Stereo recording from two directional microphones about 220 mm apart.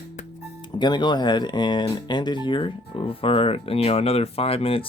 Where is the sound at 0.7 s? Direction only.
20° left (ahead or behind).